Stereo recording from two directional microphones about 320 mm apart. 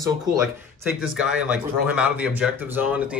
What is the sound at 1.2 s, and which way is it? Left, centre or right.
Speech, centre.